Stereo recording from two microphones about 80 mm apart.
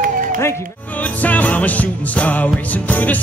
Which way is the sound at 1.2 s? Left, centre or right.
Centre.